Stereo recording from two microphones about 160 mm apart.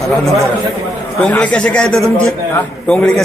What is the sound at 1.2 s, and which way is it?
A man's voice, 10° left (ahead or behind).